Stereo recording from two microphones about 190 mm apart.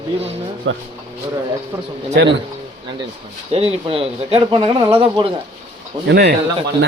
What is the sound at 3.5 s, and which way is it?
Speech, 30° right (ahead or behind).